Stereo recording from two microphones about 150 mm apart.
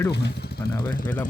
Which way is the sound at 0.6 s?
30° left (ahead or behind).